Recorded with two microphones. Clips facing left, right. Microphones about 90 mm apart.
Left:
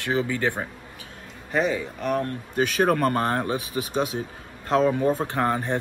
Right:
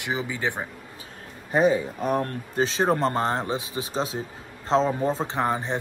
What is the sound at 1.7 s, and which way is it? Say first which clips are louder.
A man's voice: right 1 dB; 25° right (ahead or behind).